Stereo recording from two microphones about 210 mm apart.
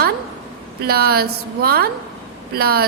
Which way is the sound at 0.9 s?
45° right (ahead or behind).